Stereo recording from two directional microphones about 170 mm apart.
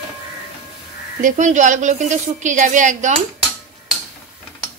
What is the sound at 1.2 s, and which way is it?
A woman's voice, 45° right (ahead or behind).